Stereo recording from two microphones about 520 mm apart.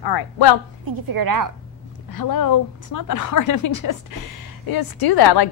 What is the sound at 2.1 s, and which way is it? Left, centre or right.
A woman's voice, left.